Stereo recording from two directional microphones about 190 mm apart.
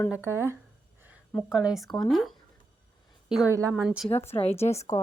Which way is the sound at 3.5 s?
15° right (ahead or behind).